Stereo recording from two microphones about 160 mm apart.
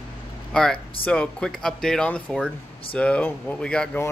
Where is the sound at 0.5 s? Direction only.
5° left (ahead or behind).